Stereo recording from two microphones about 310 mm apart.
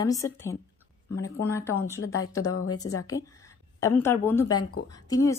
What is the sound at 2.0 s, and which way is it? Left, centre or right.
Speech, left.